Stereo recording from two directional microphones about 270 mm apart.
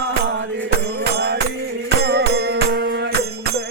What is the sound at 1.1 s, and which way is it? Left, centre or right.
Music, right.